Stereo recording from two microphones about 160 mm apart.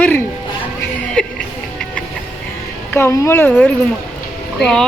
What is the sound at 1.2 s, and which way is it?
Music, 5° left (ahead or behind).